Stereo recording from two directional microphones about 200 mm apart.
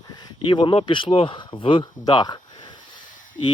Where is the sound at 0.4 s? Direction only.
25° left (ahead or behind).